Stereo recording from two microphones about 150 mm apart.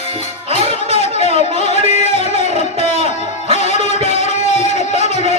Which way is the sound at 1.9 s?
50° left (ahead or behind).